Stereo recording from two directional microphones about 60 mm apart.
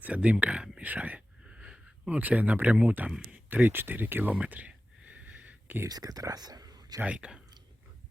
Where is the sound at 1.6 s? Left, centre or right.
Centre.